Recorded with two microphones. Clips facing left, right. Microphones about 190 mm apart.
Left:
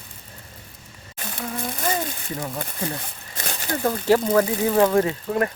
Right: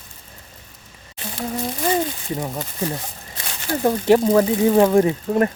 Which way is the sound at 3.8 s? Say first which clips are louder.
Right 4 dB; 20° right (ahead or behind).